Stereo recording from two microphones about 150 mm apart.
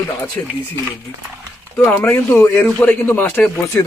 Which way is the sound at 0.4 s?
15° left (ahead or behind).